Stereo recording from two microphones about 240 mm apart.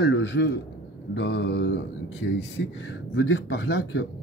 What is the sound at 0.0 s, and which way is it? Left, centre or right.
A man's voice, left.